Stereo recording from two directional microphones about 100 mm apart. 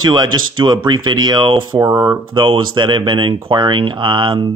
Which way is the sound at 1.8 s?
30° right (ahead or behind).